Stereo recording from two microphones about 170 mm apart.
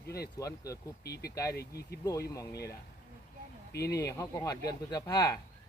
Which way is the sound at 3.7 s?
70° left (ahead or behind).